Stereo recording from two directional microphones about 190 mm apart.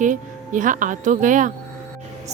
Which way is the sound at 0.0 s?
40° right (ahead or behind).